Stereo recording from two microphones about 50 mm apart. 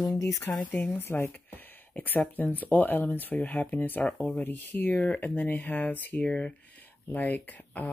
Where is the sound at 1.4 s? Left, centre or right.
Left.